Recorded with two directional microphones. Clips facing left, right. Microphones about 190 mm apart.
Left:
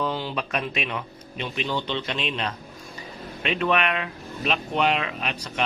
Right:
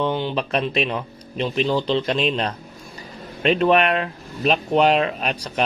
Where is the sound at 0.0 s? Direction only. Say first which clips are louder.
Right 5 dB; 20° right (ahead or behind).